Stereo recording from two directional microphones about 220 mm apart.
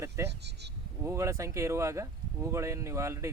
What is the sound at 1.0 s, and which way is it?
Speech, 15° right (ahead or behind).